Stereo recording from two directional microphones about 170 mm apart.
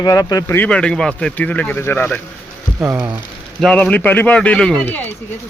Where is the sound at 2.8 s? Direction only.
15° right (ahead or behind).